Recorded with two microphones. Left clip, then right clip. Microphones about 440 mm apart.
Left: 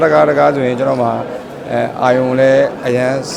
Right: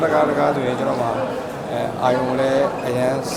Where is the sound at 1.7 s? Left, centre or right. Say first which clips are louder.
Left 7 dB; left.